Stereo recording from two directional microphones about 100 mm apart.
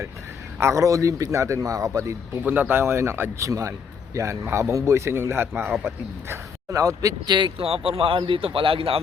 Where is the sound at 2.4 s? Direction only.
15° right (ahead or behind); by 7.3 s 35° right (ahead or behind).